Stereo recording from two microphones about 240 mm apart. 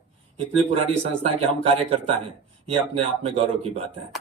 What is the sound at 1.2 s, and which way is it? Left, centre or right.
A man's voice, right.